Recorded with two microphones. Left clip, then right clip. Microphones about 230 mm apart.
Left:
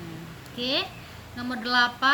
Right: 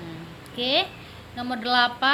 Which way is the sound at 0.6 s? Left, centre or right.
Centre.